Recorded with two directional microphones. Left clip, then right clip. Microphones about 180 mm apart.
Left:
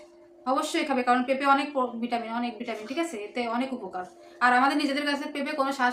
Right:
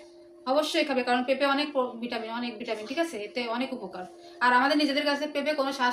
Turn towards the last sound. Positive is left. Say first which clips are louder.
# even
turn(degrees=25)  # may be behind; listen again after turning